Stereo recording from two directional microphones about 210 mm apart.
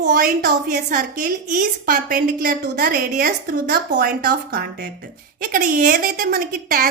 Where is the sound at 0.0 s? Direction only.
50° right (ahead or behind).